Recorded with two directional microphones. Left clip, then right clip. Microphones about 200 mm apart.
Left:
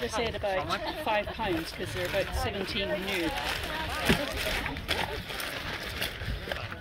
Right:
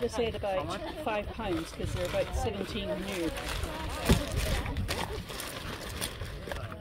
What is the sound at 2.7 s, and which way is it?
Speech, 40° right (ahead or behind).